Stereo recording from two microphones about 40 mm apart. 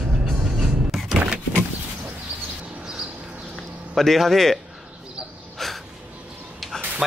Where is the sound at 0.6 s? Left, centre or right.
Centre.